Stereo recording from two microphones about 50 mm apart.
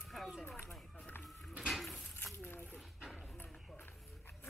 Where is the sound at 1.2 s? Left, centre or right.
Centre.